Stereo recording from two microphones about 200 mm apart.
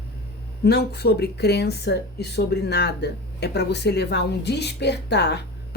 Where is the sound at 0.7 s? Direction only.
55° left (ahead or behind).